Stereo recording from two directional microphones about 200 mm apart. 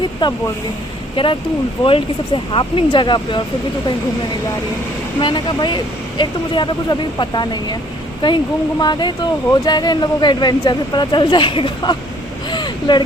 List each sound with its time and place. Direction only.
0.2 s speech: 20° left (ahead or behind)
5.2 s speech: 25° left (ahead or behind)
12.5 s vehicle: 20° left (ahead or behind)